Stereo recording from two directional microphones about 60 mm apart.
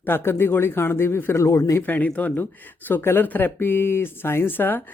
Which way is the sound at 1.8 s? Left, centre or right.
Left.